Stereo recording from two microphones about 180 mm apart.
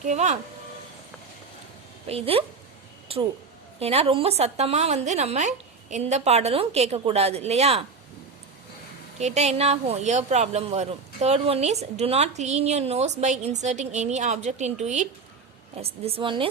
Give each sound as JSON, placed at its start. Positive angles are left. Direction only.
{"t": 0.0, "sound": "a woman's voice", "side_deg": -40}
{"t": 2.0, "sound": "a woman's voice", "side_deg": -35}
{"t": 3.8, "sound": "a woman's voice", "side_deg": -35}
{"t": 9.1, "sound": "a woman's voice", "side_deg": -35}